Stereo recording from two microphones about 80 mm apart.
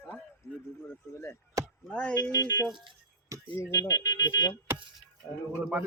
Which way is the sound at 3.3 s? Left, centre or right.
Right.